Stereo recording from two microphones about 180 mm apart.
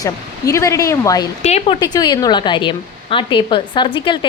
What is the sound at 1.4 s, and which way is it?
Speech, 35° left (ahead or behind).